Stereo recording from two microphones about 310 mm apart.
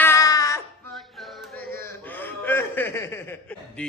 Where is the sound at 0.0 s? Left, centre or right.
Centre.